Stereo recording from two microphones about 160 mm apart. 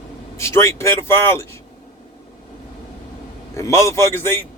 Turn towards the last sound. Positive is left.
turn(degrees=15)  # may be behind; listen again after turning